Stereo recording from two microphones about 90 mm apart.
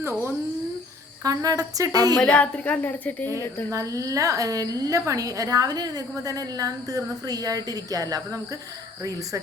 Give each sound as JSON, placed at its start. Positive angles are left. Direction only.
{"t": 0.0, "sound": "speech", "side_deg": -30}
{"t": 1.2, "sound": "a woman's voice", "side_deg": -40}
{"t": 2.2, "sound": "a woman's voice", "side_deg": 15}
{"t": 3.7, "sound": "a woman's voice", "side_deg": -40}